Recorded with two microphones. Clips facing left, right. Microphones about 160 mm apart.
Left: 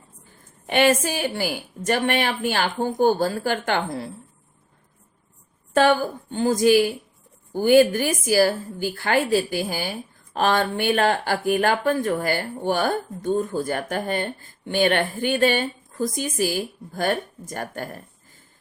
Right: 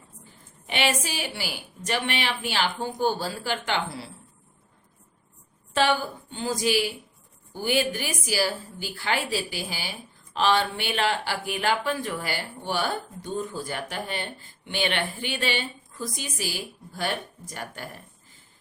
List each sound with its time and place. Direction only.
0.7 s speech: 50° left (ahead or behind)
5.7 s speech: 45° left (ahead or behind)